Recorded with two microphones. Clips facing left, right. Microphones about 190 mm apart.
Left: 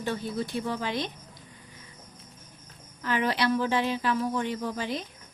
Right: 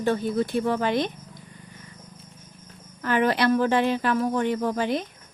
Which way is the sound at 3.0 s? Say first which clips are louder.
Right 5 dB; 55° right (ahead or behind).